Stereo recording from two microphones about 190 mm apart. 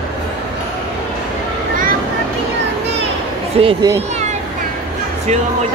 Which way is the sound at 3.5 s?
30° right (ahead or behind).